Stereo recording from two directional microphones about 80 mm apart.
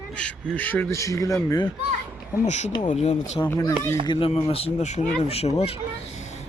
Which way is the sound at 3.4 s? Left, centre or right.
Left.